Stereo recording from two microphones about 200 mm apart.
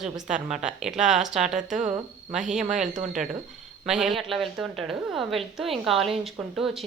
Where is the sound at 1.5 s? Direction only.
35° right (ahead or behind).